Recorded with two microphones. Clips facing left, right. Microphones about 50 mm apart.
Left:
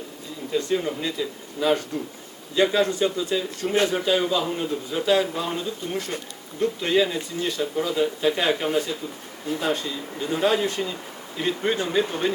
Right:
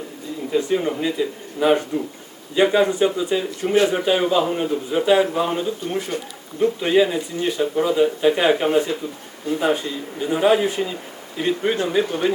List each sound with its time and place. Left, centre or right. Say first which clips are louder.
0.5 s speech: right 4 dB; centre